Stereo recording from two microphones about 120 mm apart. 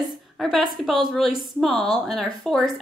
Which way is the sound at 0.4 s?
Centre (ahead or behind).